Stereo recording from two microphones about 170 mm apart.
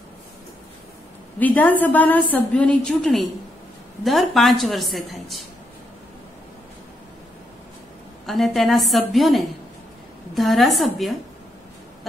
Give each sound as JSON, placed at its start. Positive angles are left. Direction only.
{"t": 1.4, "sound": "a woman's voice", "side_deg": 10}
{"t": 8.3, "sound": "a woman's voice", "side_deg": 0}